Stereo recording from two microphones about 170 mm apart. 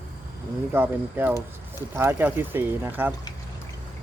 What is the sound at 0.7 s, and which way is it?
Speech, 10° right (ahead or behind).